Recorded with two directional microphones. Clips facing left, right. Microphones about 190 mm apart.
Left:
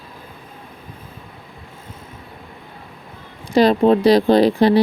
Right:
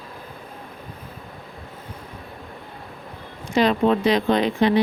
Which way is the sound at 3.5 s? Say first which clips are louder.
Left 5 dB; 35° left (ahead or behind).